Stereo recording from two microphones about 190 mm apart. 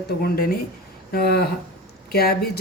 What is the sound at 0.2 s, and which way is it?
Speech, 50° left (ahead or behind).